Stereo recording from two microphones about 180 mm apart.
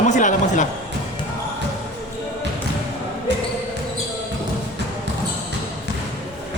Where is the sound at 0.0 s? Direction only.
45° left (ahead or behind).